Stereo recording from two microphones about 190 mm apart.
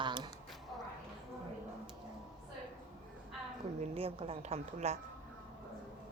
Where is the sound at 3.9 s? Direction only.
30° right (ahead or behind).